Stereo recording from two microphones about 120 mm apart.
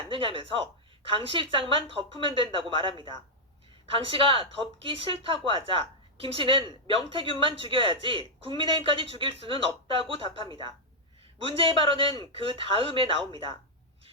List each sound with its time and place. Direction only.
0.1 s speech: 50° right (ahead or behind)
11.4 s speech: 50° right (ahead or behind)